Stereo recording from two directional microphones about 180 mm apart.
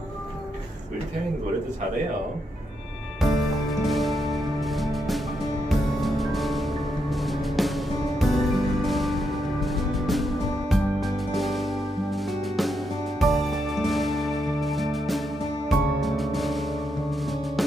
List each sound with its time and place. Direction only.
3.2 s music: centre (ahead or behind)